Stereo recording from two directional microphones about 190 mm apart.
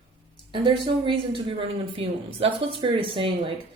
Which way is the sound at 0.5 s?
25° right (ahead or behind).